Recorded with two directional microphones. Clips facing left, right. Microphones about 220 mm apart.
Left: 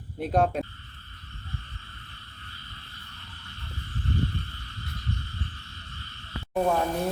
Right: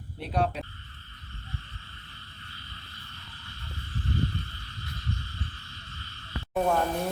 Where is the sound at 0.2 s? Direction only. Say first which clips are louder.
Left 5 dB; 45° left (ahead or behind).